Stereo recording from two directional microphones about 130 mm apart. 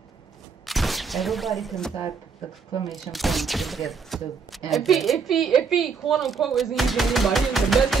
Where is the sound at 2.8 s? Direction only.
Centre (ahead or behind).